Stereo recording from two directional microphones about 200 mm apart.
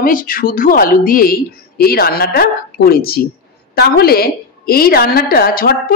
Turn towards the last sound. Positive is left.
turn(degrees=50)  # may be behind; listen again after turning